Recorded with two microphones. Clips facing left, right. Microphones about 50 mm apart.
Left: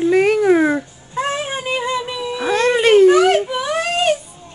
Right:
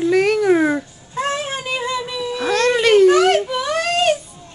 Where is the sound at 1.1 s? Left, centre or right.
Centre.